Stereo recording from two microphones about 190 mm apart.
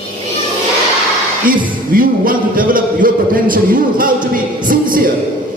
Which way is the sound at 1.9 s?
50° right (ahead or behind).